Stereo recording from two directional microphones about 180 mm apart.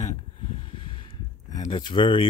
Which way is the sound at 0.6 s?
30° left (ahead or behind).